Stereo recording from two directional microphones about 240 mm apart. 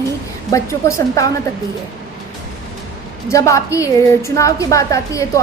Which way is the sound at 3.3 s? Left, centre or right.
Centre.